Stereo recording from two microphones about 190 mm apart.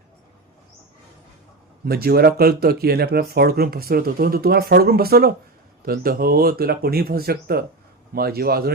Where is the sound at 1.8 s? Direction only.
55° right (ahead or behind).